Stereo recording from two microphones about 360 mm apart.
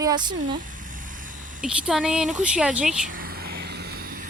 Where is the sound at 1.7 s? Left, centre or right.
Centre.